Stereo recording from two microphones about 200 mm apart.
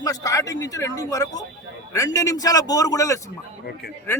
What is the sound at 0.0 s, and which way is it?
A man's voice, 15° left (ahead or behind).